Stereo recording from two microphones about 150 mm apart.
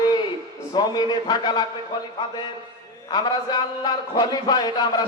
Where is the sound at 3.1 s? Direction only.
25° left (ahead or behind).